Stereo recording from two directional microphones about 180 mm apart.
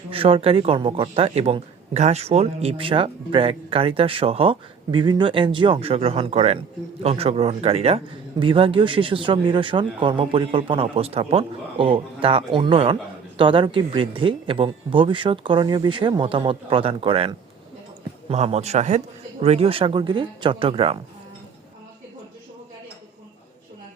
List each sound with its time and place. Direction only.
0.1 s speech: 30° right (ahead or behind)